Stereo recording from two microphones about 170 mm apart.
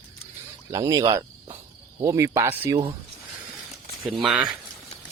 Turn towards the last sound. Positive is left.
turn(degrees=-5)  # may be behind; listen again after turning